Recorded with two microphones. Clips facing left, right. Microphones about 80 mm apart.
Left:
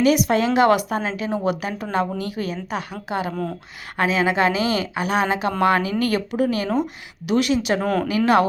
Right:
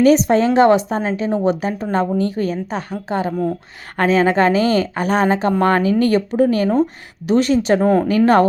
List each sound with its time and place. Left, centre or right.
0.0 s a woman's voice: right